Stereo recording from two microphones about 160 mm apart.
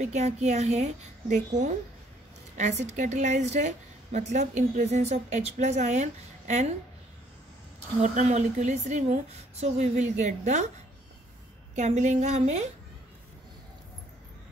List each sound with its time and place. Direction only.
0.0 s a woman's voice: 45° right (ahead or behind)
2.5 s a woman's voice: 45° right (ahead or behind)
8.0 s a woman's voice: 50° right (ahead or behind)
11.7 s a woman's voice: 50° right (ahead or behind)